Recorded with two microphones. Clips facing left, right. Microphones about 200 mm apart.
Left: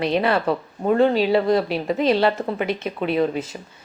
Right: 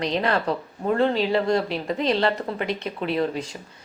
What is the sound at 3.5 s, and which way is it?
Speech, 20° left (ahead or behind).